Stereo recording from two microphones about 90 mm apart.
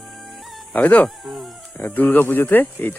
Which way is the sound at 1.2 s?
5° right (ahead or behind).